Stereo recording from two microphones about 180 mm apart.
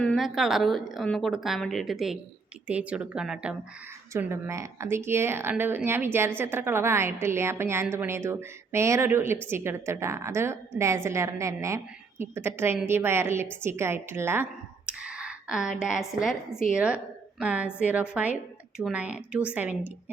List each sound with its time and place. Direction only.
0.0 s speech: centre (ahead or behind)
4.1 s a woman's voice: 15° right (ahead or behind)